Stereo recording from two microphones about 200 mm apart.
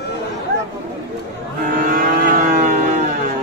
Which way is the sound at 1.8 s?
45° right (ahead or behind).